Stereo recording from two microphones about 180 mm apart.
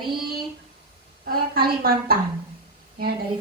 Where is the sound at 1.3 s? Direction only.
55° right (ahead or behind).